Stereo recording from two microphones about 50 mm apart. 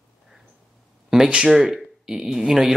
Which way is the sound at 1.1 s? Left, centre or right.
Centre.